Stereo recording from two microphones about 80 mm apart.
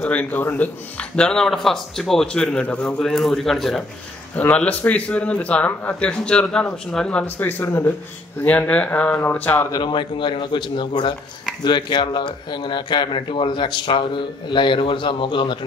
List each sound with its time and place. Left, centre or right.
0.0 s a man's voice: left
3.0 s a man's voice: centre
4.4 s a man's voice: centre
7.6 s speech: left
8.5 s a man's voice: centre
9.8 s speech: left